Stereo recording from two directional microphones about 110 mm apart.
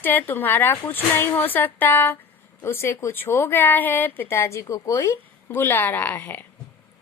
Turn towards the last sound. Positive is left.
turn(degrees=15)  # may be behind; listen again after turning